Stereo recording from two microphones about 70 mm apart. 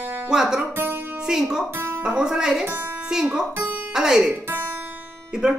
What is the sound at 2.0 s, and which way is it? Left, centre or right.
Speech, centre.